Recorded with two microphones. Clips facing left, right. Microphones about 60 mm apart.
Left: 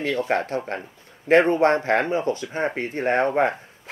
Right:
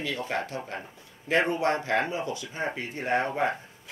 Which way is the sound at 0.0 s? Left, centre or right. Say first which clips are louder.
Left 8 dB; left.